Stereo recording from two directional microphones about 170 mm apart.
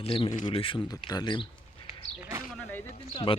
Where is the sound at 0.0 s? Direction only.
30° left (ahead or behind).